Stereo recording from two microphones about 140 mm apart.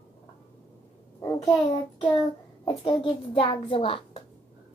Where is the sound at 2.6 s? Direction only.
35° left (ahead or behind).